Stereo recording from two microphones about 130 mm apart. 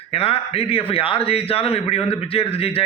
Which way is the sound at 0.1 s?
50° left (ahead or behind).